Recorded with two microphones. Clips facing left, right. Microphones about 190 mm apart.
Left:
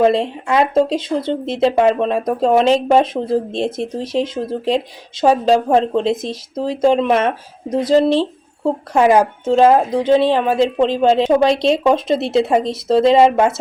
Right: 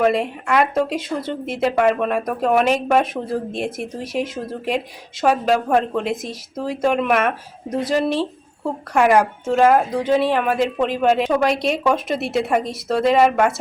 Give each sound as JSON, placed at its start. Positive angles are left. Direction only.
{"t": 0.0, "sound": "a woman's voice", "side_deg": 25}